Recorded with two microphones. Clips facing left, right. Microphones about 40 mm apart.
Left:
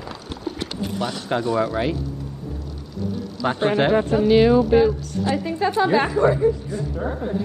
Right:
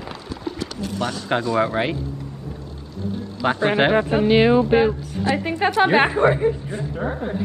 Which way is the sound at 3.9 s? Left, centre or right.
Right.